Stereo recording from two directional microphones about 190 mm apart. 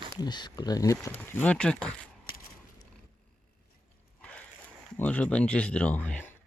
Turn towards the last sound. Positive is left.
turn(degrees=5)  # may be behind; listen again after turning